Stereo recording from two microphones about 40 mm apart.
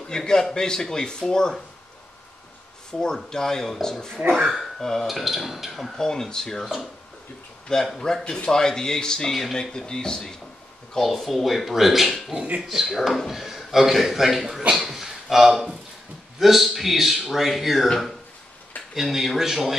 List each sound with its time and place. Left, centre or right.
0.1 s speech: centre
2.9 s speech: centre
4.3 s speech: centre
5.0 s speech: centre
5.9 s speech: centre
6.6 s speech: centre
8.0 s speech: centre
9.6 s speech: left
11.1 s speech: centre
14.9 s a sound: centre
16.3 s speech: centre
18.9 s speech: centre